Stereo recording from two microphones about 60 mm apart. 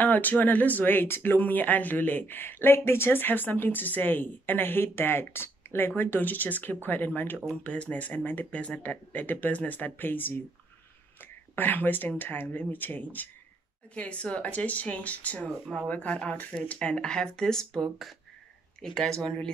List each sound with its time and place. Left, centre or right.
0.0 s speech: left
7.6 s speech: left
11.5 s speech: left
16.7 s speech: centre